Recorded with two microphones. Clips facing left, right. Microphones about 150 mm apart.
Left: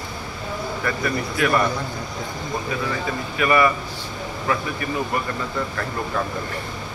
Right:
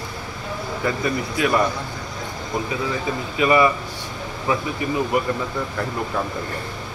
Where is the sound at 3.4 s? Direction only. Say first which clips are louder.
Right 2 dB; 20° right (ahead or behind).